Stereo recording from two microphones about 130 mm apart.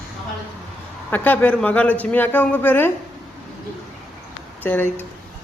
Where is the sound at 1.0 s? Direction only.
15° left (ahead or behind).